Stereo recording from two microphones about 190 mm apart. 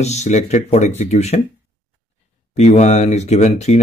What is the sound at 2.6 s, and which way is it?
Speech, 35° left (ahead or behind).